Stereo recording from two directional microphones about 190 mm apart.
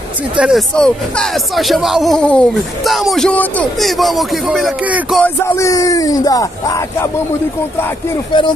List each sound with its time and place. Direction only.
0.4 s speech: centre (ahead or behind)
5.2 s speech: 10° left (ahead or behind)
8.3 s speech: 25° left (ahead or behind)